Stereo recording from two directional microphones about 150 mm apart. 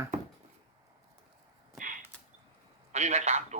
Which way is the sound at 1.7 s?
65° right (ahead or behind).